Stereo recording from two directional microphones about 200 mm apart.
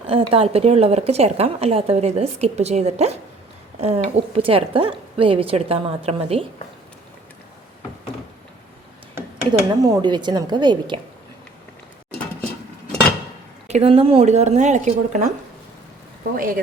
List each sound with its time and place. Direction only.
0.1 s a woman's voice: 25° right (ahead or behind)
9.1 s a woman's voice: 15° right (ahead or behind)
13.7 s speech: 30° right (ahead or behind)
16.3 s speech: 45° right (ahead or behind)